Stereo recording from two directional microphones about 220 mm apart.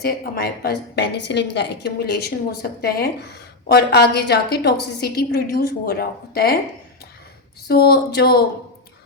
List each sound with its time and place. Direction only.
0.0 s a woman's voice: 45° left (ahead or behind)
7.7 s a woman's voice: 45° left (ahead or behind)